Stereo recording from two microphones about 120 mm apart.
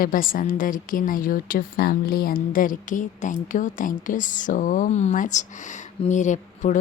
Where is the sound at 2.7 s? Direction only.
90° left.